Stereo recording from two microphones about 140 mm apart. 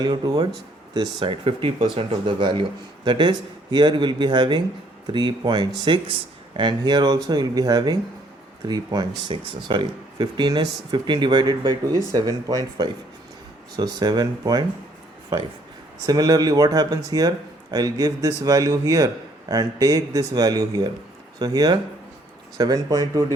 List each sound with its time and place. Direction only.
0.0 s speech: 30° right (ahead or behind)
16.0 s speech: 25° right (ahead or behind)